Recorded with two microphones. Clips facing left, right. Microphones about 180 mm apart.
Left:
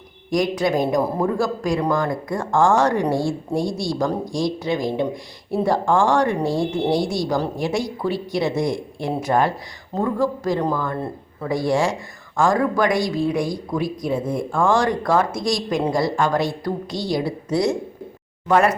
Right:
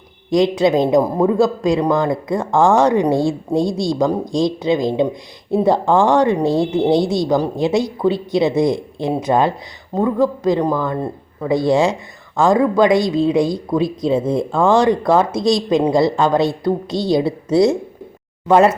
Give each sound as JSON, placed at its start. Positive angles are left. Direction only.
{"t": 0.3, "sound": "speech", "side_deg": -25}